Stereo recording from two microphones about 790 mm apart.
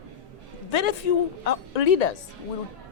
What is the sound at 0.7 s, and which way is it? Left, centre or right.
Speech, left.